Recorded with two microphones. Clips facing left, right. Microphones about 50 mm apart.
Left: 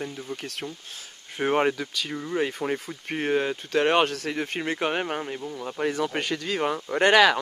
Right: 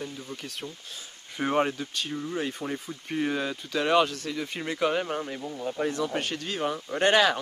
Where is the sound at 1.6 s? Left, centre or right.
Left.